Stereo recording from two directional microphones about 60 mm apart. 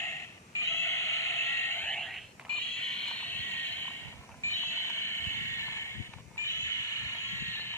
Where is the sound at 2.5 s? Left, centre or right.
Centre.